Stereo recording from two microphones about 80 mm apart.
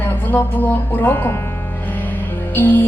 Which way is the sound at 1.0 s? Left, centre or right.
Left.